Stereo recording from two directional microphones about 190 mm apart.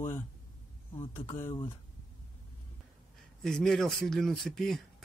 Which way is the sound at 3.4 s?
Centre (ahead or behind).